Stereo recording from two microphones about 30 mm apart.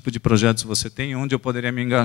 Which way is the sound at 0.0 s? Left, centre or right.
Right.